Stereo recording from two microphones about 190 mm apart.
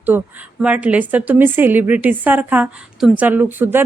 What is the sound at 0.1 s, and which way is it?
A woman's voice, 10° right (ahead or behind).